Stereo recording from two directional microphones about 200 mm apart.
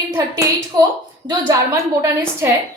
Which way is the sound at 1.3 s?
20° right (ahead or behind).